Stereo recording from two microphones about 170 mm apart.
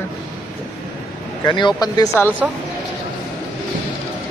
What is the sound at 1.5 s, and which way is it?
Speech, 25° left (ahead or behind).